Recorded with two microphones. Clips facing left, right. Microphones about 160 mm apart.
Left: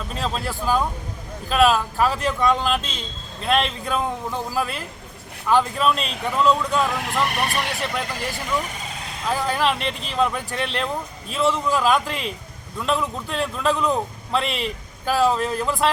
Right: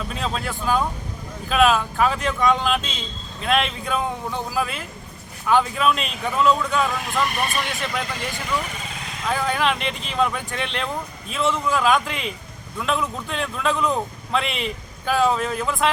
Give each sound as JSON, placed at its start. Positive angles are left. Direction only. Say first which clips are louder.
{"t": 0.1, "sound": "a man's voice", "louder": "left 4 dB", "side_deg": 0}
{"t": 7.0, "sound": "speech", "louder": "even", "side_deg": 70}
{"t": 7.7, "sound": "a man's voice", "louder": "left 1 dB", "side_deg": 0}
{"t": 9.2, "sound": "a man's voice", "louder": "even", "side_deg": 0}